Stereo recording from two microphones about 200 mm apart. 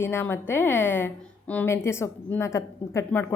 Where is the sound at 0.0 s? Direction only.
10° left (ahead or behind).